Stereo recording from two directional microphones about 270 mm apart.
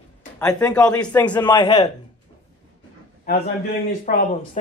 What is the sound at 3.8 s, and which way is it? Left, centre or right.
Speech, left.